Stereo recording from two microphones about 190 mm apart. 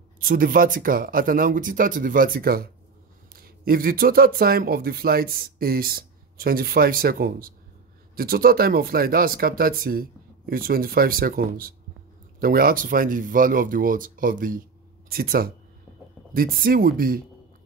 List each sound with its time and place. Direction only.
0.2 s speech: 50° right (ahead or behind)